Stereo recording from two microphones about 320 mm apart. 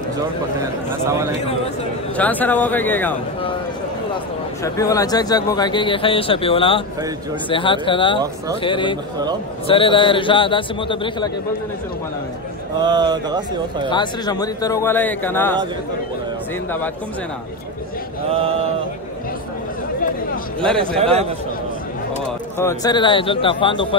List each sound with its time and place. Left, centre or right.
2.1 s speech: centre
4.6 s speech: centre
12.8 s speech: centre
13.8 s speech: centre
18.3 s speech: centre
21.0 s a man's voice: centre
22.6 s speech: centre